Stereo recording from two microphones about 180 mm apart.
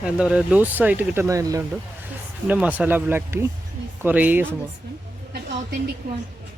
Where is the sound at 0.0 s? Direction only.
5° right (ahead or behind).